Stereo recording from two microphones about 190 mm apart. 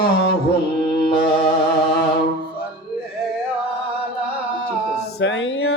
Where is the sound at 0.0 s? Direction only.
55° left (ahead or behind).